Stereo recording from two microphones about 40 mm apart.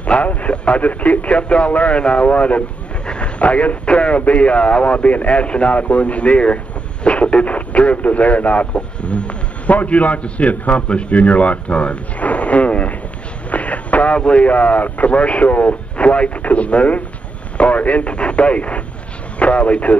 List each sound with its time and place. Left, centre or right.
0.0 s a man's voice: left